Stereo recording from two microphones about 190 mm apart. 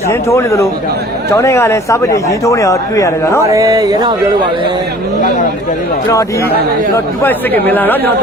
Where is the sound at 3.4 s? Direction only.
15° right (ahead or behind).